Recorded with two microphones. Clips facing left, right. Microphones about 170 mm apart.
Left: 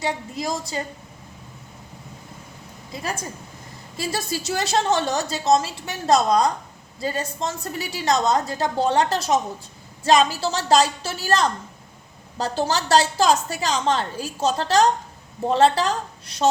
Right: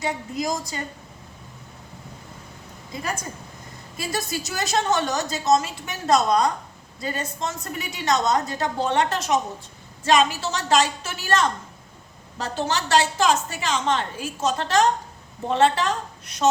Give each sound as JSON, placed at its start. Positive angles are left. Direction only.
{"t": 0.0, "sound": "a woman's voice", "side_deg": 30}
{"t": 3.9, "sound": "a woman's voice", "side_deg": 30}